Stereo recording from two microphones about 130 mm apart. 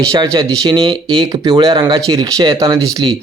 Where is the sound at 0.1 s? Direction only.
30° right (ahead or behind).